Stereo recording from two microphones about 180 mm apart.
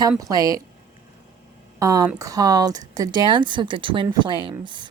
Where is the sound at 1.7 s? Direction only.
20° right (ahead or behind).